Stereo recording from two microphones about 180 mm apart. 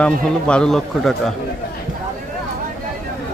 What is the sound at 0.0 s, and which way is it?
A man's voice, 5° left (ahead or behind).